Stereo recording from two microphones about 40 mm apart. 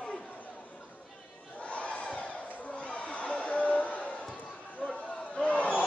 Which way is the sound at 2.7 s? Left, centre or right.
Left.